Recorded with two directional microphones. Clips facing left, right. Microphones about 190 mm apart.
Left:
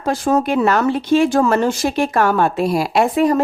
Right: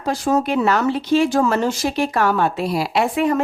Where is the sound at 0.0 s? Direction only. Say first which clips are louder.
Left 2 dB; 55° left (ahead or behind).